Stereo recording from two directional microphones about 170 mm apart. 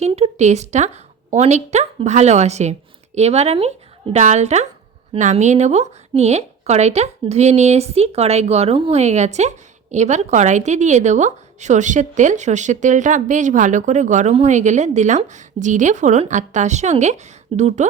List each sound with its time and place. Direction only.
0.0 s a woman's voice: 40° right (ahead or behind)